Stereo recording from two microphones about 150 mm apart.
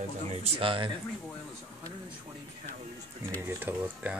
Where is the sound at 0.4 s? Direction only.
40° right (ahead or behind).